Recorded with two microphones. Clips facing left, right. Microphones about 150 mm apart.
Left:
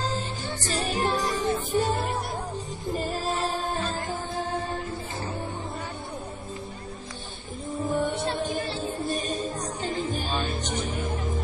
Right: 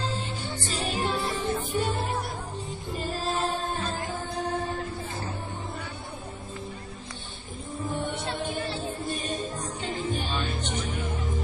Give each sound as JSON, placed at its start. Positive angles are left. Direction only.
{"t": 0.0, "sound": "music", "side_deg": 40}
{"t": 7.8, "sound": "music", "side_deg": 40}